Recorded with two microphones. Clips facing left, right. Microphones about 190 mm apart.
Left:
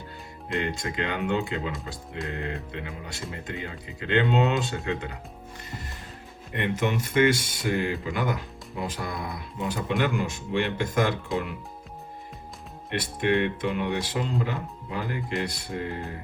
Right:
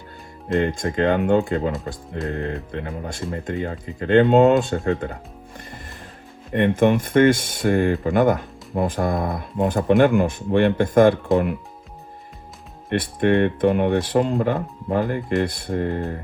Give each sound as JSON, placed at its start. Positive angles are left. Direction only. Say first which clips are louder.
{"t": 0.4, "sound": "speech", "louder": "right 8 dB", "side_deg": -50}
{"t": 6.5, "sound": "speech", "louder": "right 10 dB", "side_deg": -50}
{"t": 12.9, "sound": "speech", "louder": "right 6 dB", "side_deg": -50}